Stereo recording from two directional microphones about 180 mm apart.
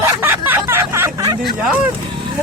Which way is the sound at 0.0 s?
10° right (ahead or behind).